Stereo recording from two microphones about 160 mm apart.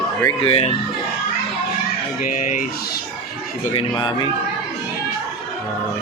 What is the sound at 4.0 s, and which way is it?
Speech, 30° left (ahead or behind).